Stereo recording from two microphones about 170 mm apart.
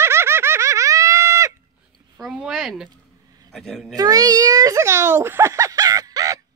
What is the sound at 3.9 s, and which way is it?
A child's voice, 20° right (ahead or behind).